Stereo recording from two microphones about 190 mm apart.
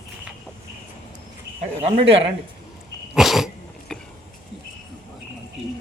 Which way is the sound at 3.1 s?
Centre (ahead or behind).